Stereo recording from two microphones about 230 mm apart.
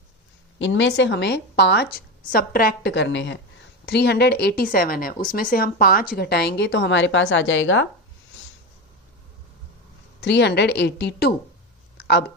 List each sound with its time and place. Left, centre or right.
0.6 s a woman's voice: left
10.2 s a woman's voice: left
11.9 s a sound: left